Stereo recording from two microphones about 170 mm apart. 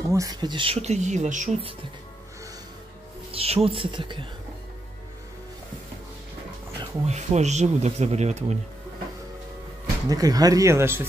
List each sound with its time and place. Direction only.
0.1 s speech: 20° right (ahead or behind); by 1.6 s 45° right (ahead or behind)
3.3 s speech: 35° right (ahead or behind)
7.1 s speech: 40° right (ahead or behind)
10.0 s speech: 20° right (ahead or behind)